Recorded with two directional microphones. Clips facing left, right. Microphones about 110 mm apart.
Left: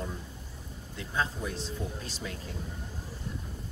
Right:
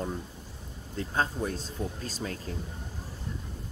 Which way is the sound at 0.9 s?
40° right (ahead or behind).